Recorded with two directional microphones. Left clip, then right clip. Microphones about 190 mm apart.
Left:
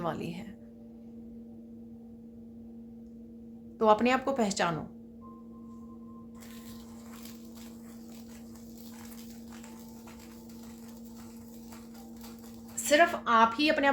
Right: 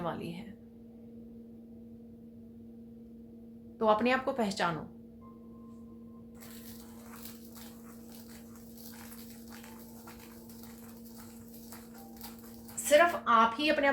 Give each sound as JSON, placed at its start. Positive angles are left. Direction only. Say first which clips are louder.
{"t": 0.0, "sound": "speech", "louder": "left 3 dB", "side_deg": 40}
{"t": 3.8, "sound": "speech", "louder": "left 3 dB", "side_deg": 40}
{"t": 12.8, "sound": "a woman's voice", "louder": "even", "side_deg": 45}